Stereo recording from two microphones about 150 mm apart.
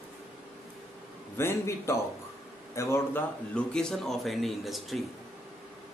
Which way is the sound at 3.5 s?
5° left (ahead or behind).